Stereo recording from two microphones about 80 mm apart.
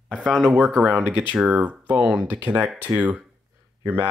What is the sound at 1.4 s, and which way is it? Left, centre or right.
Speech, centre.